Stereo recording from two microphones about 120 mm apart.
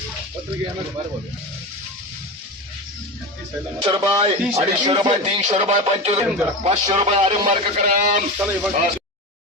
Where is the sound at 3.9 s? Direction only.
35° right (ahead or behind).